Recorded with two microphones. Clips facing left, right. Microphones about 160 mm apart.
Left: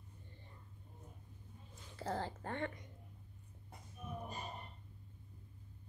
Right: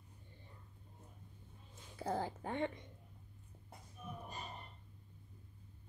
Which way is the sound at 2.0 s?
15° right (ahead or behind).